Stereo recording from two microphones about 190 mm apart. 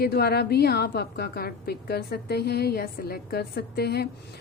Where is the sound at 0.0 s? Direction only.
55° left (ahead or behind).